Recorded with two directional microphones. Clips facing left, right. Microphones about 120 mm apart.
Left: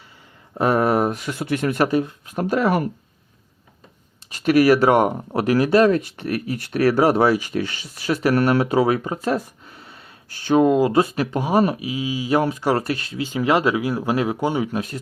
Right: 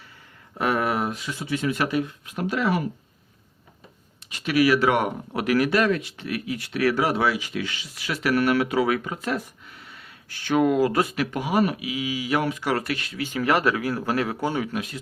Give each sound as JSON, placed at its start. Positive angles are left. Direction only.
{"t": 0.6, "sound": "speech", "side_deg": 35}
{"t": 1.9, "sound": "speech", "side_deg": 35}
{"t": 4.3, "sound": "speech", "side_deg": 45}